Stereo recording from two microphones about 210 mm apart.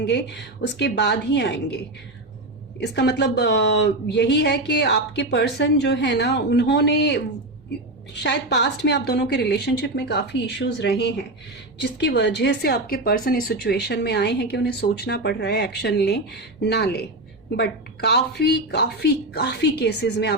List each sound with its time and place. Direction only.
0.0 s speech: 55° left (ahead or behind)
2.8 s speech: 55° left (ahead or behind)